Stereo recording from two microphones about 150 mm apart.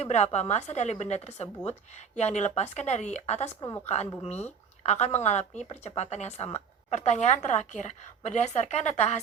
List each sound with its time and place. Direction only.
0.0 s speech: 45° left (ahead or behind)